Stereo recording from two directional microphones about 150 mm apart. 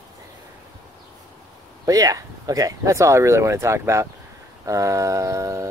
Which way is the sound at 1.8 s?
25° right (ahead or behind).